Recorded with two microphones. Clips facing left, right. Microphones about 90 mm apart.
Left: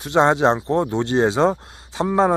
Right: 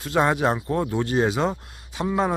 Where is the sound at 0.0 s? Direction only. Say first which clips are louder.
Left 5 dB; 25° left (ahead or behind).